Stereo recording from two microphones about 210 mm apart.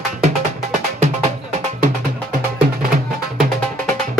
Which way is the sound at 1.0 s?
30° right (ahead or behind).